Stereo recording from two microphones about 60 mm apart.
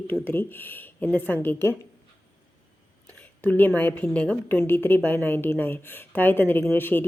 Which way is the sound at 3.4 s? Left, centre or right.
Left.